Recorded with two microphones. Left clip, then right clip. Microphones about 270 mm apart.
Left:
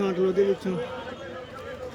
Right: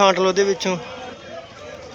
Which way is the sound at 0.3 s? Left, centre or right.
Centre.